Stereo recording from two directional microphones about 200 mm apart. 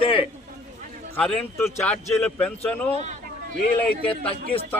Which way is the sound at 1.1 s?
5° left (ahead or behind).